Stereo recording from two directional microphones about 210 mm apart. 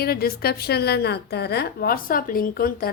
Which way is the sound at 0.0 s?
45° left (ahead or behind).